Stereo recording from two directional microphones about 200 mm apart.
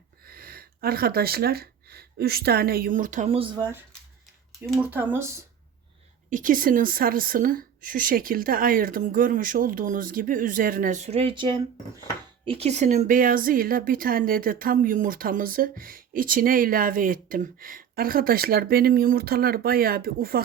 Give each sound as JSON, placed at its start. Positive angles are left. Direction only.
{"t": 0.3, "sound": "speech", "side_deg": -45}
{"t": 4.8, "sound": "speech", "side_deg": -10}
{"t": 6.3, "sound": "speech", "side_deg": -45}